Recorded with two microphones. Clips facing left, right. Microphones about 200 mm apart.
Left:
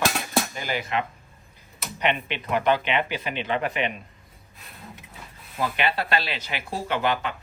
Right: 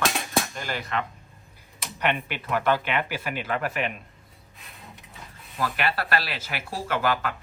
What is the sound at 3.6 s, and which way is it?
Speech, 5° right (ahead or behind).